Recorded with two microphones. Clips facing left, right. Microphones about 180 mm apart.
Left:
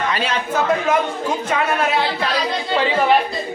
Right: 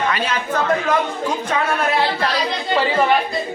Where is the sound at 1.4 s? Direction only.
5° left (ahead or behind).